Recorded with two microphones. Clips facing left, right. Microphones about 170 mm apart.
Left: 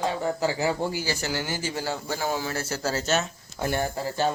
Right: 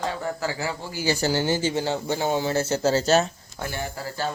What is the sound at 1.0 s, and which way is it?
Speech, 30° right (ahead or behind).